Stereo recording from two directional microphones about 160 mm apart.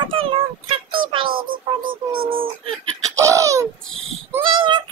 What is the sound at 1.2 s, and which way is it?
Music, 65° right (ahead or behind).